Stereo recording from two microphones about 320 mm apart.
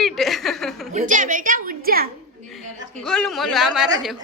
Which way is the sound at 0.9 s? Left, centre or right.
Right.